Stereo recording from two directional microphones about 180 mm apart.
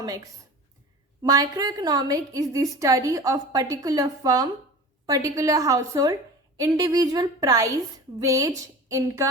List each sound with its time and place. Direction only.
1.2 s a woman's voice: 20° right (ahead or behind)